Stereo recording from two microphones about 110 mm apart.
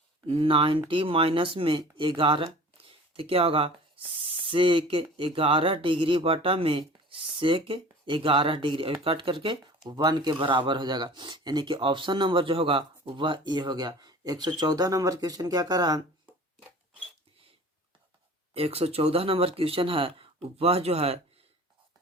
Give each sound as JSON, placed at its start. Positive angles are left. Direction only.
{"t": 0.3, "sound": "speech", "side_deg": -55}
{"t": 18.5, "sound": "speech", "side_deg": -65}